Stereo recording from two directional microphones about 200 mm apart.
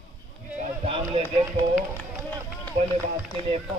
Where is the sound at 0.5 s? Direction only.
35° right (ahead or behind).